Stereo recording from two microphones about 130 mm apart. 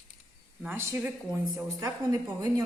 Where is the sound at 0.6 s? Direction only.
20° right (ahead or behind).